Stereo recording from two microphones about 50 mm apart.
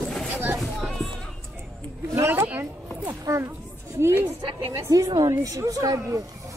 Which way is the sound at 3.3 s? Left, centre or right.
Right.